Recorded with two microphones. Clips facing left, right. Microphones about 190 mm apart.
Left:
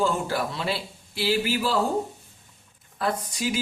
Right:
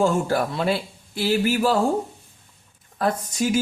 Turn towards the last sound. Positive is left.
turn(degrees=-45)  # may be behind; listen again after turning